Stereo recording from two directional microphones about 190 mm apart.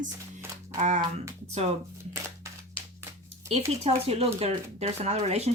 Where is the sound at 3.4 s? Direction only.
35° right (ahead or behind).